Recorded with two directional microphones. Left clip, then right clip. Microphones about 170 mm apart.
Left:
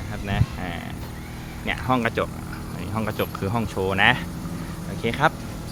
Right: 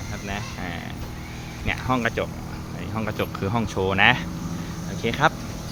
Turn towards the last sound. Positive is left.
turn(degrees=5)  # may be behind; listen again after turning